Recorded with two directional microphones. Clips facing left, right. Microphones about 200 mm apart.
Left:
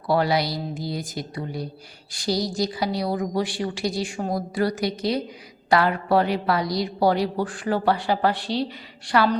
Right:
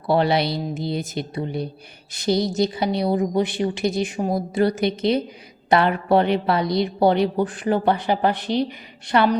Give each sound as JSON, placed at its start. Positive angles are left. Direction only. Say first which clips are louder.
{"t": 0.1, "sound": "a woman's voice", "louder": "right 3 dB", "side_deg": -25}